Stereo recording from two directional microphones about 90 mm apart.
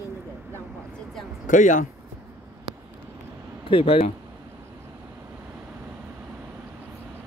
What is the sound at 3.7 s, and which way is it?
Speech, 90° left.